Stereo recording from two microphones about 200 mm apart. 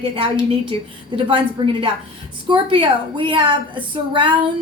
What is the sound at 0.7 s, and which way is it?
A woman's voice, 25° right (ahead or behind).